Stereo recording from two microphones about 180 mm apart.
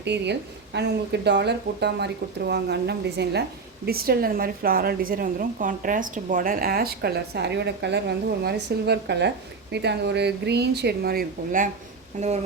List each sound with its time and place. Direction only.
0.0 s speech: 70° right (ahead or behind); by 11.7 s 55° right (ahead or behind)